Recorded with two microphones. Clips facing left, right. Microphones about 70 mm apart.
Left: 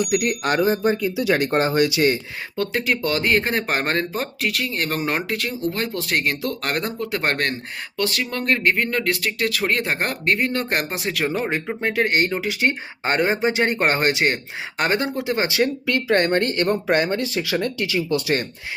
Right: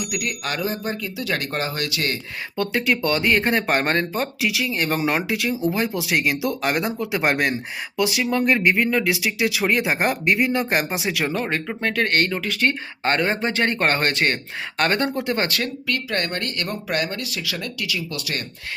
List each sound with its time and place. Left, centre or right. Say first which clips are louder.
0.2 s speech: left 6 dB; left
0.8 s speech: left 7 dB; centre
1.5 s speech: left 7 dB; left
1.8 s speech: left 8 dB; centre
2.6 s speech: right 1 dB; centre
11.5 s speech: left 1 dB; centre
15.4 s speech: left 4 dB; centre